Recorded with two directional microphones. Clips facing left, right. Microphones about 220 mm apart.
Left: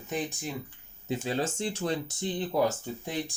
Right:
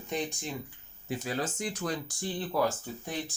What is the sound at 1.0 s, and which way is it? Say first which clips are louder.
Speech: left 3 dB; 25° left (ahead or behind).